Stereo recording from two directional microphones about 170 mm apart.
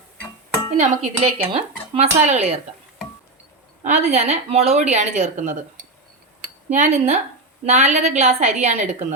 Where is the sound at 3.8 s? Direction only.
40° right (ahead or behind).